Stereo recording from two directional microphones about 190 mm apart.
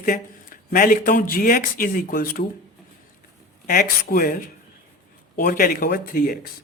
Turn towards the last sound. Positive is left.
turn(degrees=50)  # may be behind; listen again after turning